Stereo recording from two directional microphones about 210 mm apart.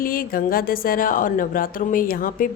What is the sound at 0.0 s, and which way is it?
A woman's voice, 45° left (ahead or behind).